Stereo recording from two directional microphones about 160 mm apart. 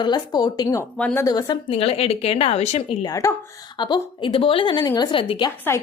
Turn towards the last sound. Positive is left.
turn(degrees=30)  # may be behind; listen again after turning